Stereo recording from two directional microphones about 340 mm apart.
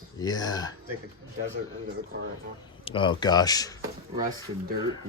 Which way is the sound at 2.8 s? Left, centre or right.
Centre.